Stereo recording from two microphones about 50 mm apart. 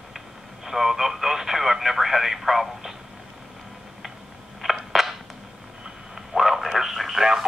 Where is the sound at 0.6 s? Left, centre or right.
Centre.